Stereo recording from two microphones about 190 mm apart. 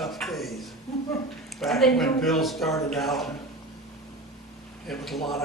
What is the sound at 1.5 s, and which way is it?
Speech, centre (ahead or behind).